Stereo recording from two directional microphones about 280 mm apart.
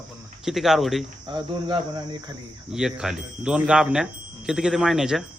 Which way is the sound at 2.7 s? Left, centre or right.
Centre.